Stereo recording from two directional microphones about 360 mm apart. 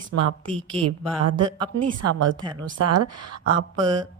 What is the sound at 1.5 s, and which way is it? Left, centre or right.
A woman's voice, centre.